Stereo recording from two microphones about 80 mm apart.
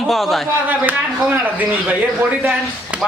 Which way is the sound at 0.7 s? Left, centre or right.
Right.